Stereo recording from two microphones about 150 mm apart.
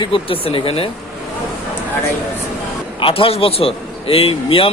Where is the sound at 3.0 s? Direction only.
40° left (ahead or behind).